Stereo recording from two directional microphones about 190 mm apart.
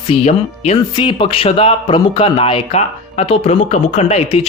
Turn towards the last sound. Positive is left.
turn(degrees=35)  # may be behind; listen again after turning